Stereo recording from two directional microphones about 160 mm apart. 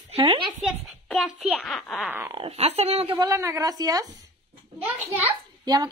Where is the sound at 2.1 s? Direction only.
15° right (ahead or behind).